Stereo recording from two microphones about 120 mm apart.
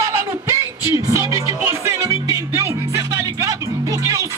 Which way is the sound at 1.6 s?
25° right (ahead or behind).